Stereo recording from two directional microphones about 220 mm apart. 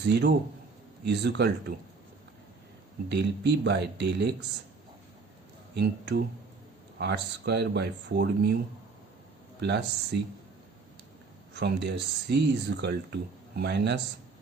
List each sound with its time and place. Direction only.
0.0 s speech: 50° right (ahead or behind)
3.1 s speech: 50° right (ahead or behind)
5.7 s speech: 50° right (ahead or behind)
9.6 s speech: 50° right (ahead or behind)
11.5 s speech: 50° right (ahead or behind)